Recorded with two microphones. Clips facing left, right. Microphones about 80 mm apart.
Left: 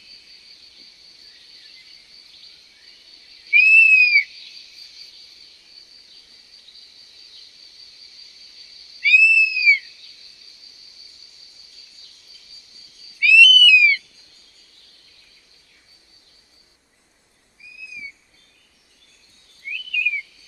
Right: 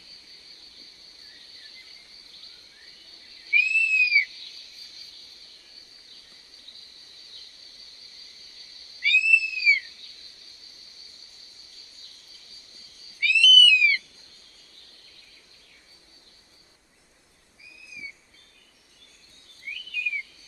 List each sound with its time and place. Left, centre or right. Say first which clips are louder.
0.0 s cricket: left 1 dB; right
19.7 s bird vocalization: left 7 dB; right